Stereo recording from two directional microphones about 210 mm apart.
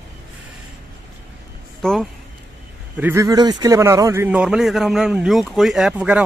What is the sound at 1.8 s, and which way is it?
Speech, 5° left (ahead or behind).